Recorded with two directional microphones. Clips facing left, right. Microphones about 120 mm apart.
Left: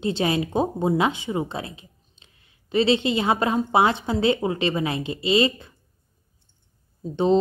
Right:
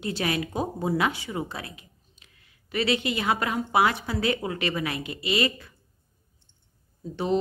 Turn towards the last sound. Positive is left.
turn(degrees=25)  # may be behind; listen again after turning